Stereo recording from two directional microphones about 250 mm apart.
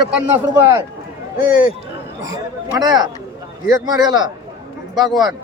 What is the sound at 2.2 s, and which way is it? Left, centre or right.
Speech, centre.